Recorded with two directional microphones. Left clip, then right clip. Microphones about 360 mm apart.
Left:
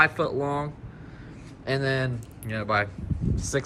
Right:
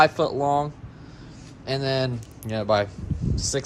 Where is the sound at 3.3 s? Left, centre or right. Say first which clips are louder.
Right 2 dB; centre.